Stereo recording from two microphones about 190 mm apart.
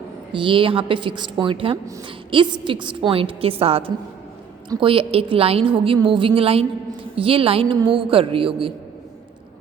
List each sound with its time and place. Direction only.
0.3 s a woman's voice: 25° right (ahead or behind)